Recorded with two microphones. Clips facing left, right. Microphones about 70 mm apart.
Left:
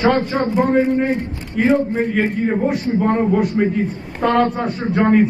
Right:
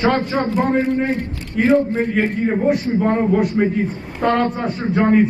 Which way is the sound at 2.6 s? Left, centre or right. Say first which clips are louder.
Right 2 dB; centre.